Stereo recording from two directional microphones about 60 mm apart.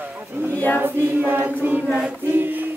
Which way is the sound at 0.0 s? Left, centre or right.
Right.